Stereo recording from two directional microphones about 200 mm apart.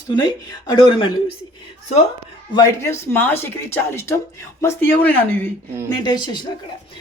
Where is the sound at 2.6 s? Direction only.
15° left (ahead or behind).